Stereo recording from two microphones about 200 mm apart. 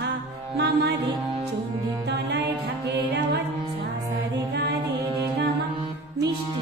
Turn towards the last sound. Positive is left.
turn(degrees=-55)  # may be behind; listen again after turning